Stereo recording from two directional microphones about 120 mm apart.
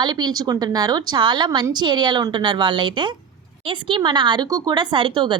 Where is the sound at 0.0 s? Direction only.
35° right (ahead or behind).